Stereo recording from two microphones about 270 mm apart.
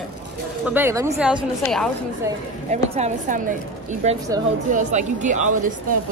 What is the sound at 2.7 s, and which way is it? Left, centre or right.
A woman's voice, right.